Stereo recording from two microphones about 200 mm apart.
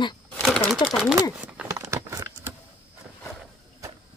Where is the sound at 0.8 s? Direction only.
Centre (ahead or behind).